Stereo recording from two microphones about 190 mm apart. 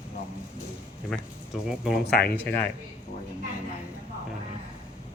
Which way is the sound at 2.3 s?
10° left (ahead or behind).